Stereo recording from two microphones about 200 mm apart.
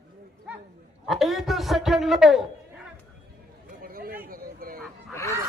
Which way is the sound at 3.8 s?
45° right (ahead or behind).